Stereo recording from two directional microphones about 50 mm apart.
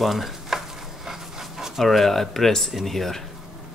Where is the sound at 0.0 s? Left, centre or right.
Centre.